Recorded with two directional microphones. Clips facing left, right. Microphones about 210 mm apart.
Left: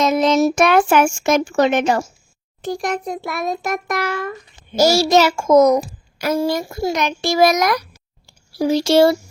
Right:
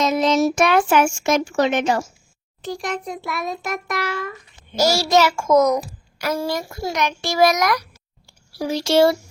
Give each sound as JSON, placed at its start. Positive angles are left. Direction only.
{"t": 0.0, "sound": "a child's voice", "side_deg": 55}
{"t": 4.8, "sound": "a child's voice", "side_deg": 25}